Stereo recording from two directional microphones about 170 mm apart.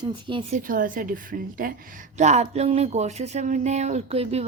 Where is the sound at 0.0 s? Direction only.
30° right (ahead or behind).